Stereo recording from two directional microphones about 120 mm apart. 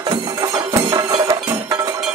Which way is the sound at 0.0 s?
35° right (ahead or behind).